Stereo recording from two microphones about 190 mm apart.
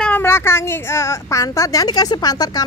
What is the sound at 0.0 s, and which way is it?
A woman's voice, 10° left (ahead or behind).